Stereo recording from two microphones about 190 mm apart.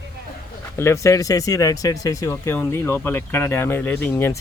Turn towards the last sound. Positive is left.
turn(degrees=10)  # may be behind; listen again after turning